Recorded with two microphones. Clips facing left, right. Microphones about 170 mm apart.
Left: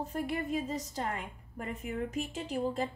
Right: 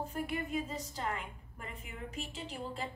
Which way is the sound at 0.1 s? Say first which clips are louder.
Left 5 dB; 40° left (ahead or behind).